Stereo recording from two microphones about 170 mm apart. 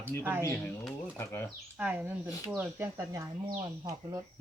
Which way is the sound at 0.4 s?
15° left (ahead or behind).